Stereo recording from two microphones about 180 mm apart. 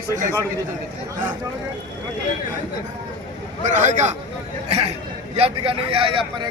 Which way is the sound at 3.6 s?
40° right (ahead or behind).